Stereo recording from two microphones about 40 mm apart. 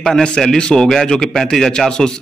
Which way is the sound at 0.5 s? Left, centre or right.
Left.